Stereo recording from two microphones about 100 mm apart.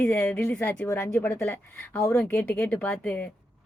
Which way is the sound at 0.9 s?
30° left (ahead or behind).